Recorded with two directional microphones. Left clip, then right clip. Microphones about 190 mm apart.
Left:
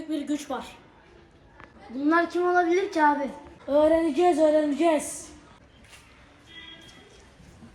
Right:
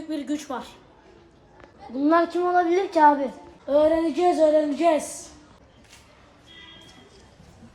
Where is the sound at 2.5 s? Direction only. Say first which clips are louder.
Right 1 dB; 45° right (ahead or behind).